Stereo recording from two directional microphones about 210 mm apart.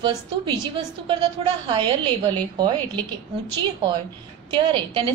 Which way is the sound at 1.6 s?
20° right (ahead or behind).